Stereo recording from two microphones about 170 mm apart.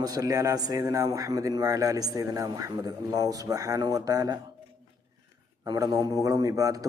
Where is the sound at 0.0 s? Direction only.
20° right (ahead or behind).